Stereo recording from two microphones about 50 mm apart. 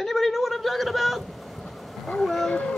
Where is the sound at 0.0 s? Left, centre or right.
Centre.